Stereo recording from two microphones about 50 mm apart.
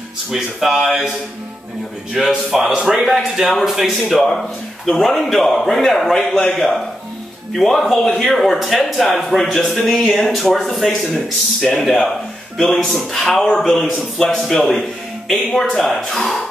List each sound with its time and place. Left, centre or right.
0.3 s speech: centre
2.1 s a man's voice: centre
6.1 s speech: centre
6.5 s speech: centre